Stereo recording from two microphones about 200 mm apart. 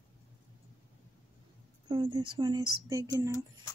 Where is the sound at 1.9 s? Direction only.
20° right (ahead or behind).